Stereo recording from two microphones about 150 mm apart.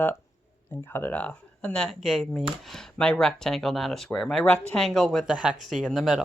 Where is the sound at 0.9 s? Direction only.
10° left (ahead or behind).